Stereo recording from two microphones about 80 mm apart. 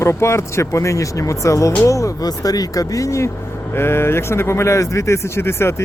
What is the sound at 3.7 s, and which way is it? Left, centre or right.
Speech, left.